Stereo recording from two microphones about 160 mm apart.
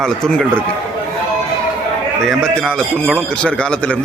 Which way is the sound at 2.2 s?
5° left (ahead or behind).